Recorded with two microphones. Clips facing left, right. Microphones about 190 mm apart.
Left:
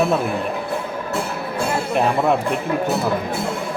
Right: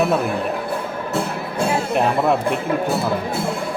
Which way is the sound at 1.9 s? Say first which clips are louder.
Left 1 dB; centre (ahead or behind).